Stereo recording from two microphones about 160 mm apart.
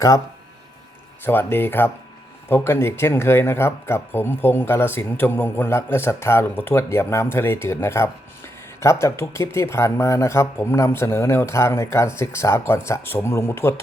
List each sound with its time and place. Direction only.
1.2 s speech: 15° left (ahead or behind)